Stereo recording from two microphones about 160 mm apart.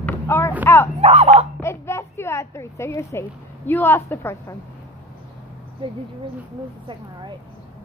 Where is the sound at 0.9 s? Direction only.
40° right (ahead or behind).